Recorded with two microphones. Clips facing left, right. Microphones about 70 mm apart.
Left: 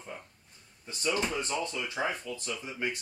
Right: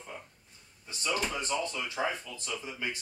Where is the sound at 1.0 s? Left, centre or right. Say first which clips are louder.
Left 2 dB; left.